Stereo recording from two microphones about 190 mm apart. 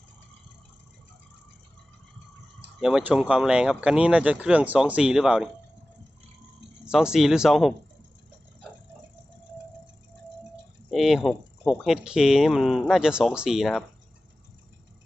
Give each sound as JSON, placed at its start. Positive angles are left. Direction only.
{"t": 2.8, "sound": "speech", "side_deg": -5}
{"t": 6.8, "sound": "speech", "side_deg": -5}
{"t": 10.9, "sound": "speech", "side_deg": 0}